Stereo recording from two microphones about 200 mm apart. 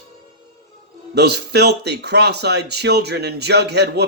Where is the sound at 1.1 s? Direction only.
55° right (ahead or behind).